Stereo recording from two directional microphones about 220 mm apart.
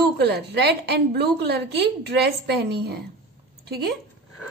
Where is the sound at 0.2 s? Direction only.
50° right (ahead or behind).